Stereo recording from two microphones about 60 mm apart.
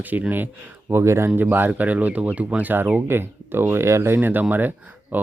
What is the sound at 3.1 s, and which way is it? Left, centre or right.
Speech, right.